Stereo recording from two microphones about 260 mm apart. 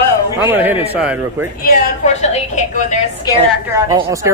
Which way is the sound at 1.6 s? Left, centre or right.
Left.